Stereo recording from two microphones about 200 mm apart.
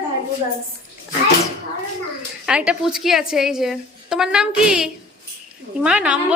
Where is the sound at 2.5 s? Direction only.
5° right (ahead or behind).